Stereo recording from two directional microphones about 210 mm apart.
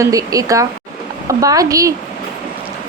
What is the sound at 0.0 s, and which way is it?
A woman's voice, 15° right (ahead or behind).